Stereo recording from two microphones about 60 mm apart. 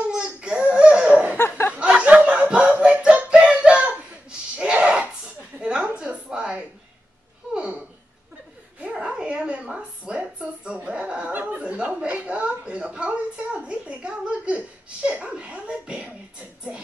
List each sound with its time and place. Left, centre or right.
0.1 s babbling: centre
1.3 s a sound: left
1.7 s music: centre
4.6 s sneeze: centre
5.6 s a sound: centre
8.9 s dog: centre